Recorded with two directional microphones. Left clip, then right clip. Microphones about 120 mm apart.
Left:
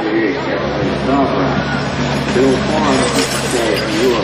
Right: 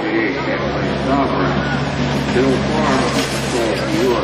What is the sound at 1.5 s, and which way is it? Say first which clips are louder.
Vehicle: left 2 dB; 40° left (ahead or behind).